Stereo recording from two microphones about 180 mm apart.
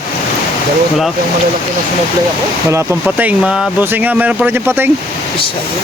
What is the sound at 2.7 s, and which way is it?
Speech, 10° right (ahead or behind).